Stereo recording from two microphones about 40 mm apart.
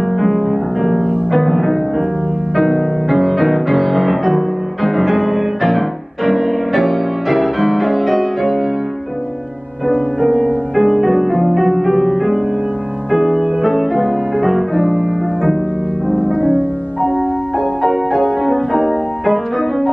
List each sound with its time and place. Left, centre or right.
0.1 s music: centre
9.8 s music: centre
10.7 s music: centre
16.1 s music: left
17.8 s music: centre